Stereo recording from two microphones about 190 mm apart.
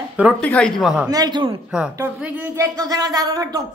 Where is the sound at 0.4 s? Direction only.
5° left (ahead or behind).